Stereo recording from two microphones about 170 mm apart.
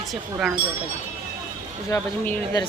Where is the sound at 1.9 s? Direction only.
10° left (ahead or behind).